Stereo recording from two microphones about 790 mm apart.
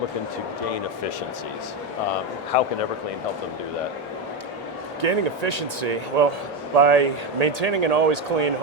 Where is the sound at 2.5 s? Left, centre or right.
Left.